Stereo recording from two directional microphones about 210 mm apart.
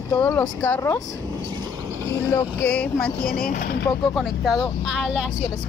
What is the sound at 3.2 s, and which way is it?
Speech, 45° left (ahead or behind).